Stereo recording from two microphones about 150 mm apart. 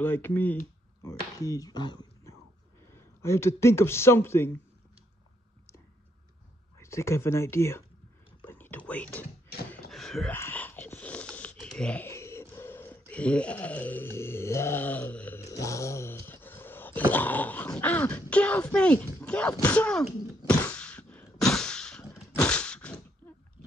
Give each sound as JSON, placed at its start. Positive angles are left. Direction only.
{"t": 0.0, "sound": "speech", "side_deg": 15}
{"t": 1.0, "sound": "speech", "side_deg": 20}
{"t": 2.9, "sound": "a man's voice", "side_deg": 15}
{"t": 6.8, "sound": "speech", "side_deg": 20}
{"t": 8.5, "sound": "a sound", "side_deg": 10}
{"t": 19.6, "sound": "thunk", "side_deg": 10}
{"t": 21.4, "sound": "a sound", "side_deg": 5}